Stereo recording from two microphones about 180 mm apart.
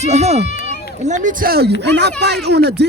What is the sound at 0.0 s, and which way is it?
Speech, 40° right (ahead or behind).